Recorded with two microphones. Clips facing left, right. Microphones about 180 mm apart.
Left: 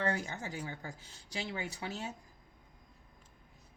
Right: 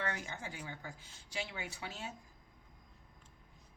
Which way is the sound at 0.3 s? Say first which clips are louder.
Left 4 dB; 40° left (ahead or behind).